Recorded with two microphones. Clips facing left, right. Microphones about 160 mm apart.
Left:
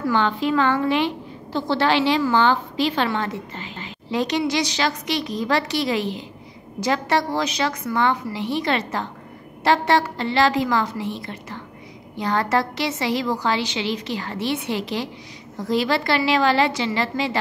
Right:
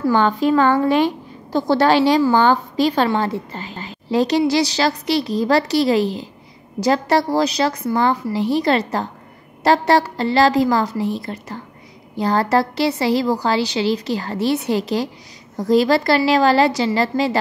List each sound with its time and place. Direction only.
0.1 s a woman's voice: 40° right (ahead or behind)